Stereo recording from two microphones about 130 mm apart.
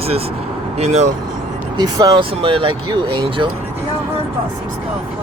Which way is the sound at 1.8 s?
30° right (ahead or behind).